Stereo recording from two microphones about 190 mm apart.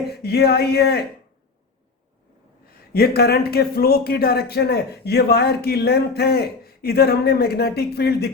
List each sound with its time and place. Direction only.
0.1 s speech: 55° left (ahead or behind)
2.9 s speech: 55° left (ahead or behind)